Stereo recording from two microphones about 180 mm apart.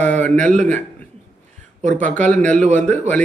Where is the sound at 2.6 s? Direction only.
40° right (ahead or behind).